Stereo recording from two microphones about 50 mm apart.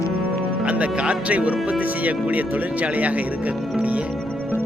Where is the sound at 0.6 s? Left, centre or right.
Right.